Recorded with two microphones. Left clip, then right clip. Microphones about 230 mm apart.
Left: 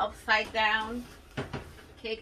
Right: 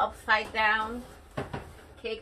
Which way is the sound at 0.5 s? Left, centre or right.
Left.